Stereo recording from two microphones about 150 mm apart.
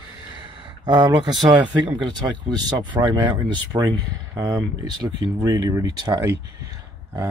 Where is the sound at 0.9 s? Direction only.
25° right (ahead or behind).